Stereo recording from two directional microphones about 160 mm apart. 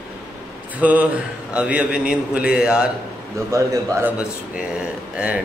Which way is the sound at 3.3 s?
20° right (ahead or behind).